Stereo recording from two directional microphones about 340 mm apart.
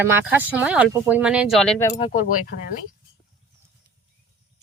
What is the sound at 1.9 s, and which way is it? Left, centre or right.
Speech, centre.